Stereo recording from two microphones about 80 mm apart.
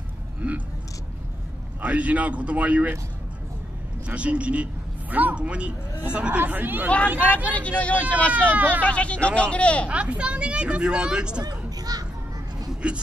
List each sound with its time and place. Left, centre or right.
0.4 s a woman's voice: centre
1.8 s speech: centre
4.0 s a woman's voice: centre
7.2 s speech: centre
8.5 s speech: centre
8.8 s speech: centre
9.8 s a woman's voice: centre
11.4 s children playing: right
12.8 s a woman's voice: centre